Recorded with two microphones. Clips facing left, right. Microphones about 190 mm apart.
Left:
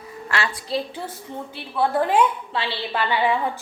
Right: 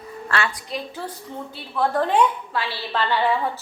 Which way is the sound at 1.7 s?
5° left (ahead or behind).